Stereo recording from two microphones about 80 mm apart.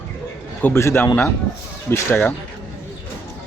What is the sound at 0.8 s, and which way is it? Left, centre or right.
Speech, left.